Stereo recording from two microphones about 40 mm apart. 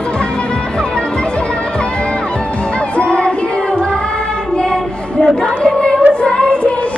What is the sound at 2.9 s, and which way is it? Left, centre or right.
Music, left.